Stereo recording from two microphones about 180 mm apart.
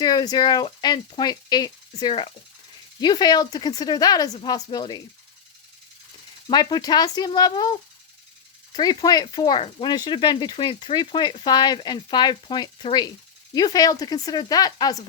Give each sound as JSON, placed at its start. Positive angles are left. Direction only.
{"t": 0.0, "sound": "speech", "side_deg": 25}
{"t": 6.5, "sound": "speech", "side_deg": 25}